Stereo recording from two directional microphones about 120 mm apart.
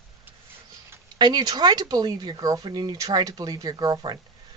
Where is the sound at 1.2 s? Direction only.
35° right (ahead or behind).